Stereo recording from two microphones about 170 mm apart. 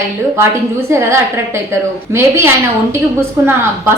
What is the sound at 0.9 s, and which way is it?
A woman's voice, 15° right (ahead or behind).